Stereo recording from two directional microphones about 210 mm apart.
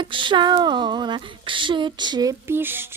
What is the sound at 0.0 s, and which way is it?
Speech, 25° right (ahead or behind).